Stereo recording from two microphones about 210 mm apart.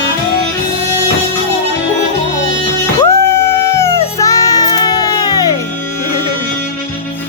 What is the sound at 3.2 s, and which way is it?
Music, 10° left (ahead or behind).